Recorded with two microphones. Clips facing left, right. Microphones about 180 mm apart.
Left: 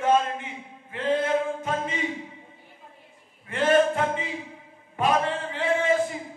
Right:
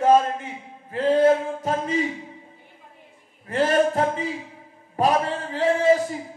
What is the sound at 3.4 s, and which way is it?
A man's voice, 40° right (ahead or behind).